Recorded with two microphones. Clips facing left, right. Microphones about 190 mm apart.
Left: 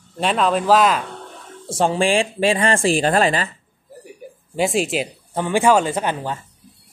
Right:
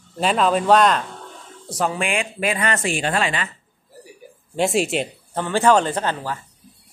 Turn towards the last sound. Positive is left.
turn(degrees=15)  # may be behind; listen again after turning